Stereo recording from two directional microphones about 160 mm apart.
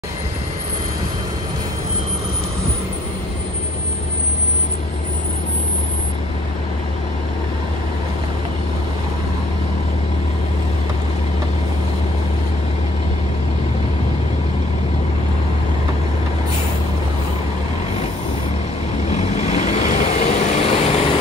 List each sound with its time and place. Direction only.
19.0 s vehicle: 45° left (ahead or behind)